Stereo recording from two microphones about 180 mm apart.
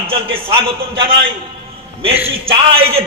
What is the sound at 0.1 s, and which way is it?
Speech, 30° right (ahead or behind).